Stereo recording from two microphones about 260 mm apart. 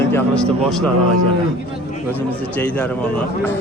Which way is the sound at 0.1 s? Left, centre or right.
Centre.